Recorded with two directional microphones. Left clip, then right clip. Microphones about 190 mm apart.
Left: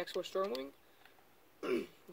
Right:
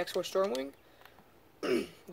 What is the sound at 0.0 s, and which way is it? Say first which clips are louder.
Speech: right 6 dB; 20° right (ahead or behind).